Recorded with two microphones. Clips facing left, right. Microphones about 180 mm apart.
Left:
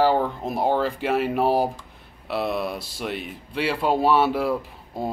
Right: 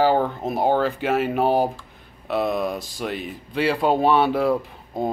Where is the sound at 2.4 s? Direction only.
45° right (ahead or behind).